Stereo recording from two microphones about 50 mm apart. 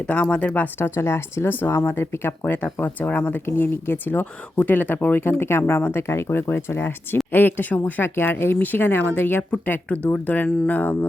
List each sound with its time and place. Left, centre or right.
0.0 s speech: left
0.8 s speech: left
1.5 s speech: left
6.7 s speech: left
8.1 s speech: left